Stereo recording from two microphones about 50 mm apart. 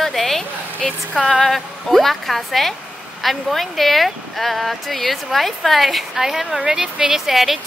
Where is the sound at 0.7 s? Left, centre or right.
Centre.